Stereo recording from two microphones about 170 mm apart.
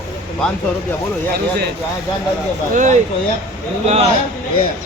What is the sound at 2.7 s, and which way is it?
A man's voice, 45° right (ahead or behind).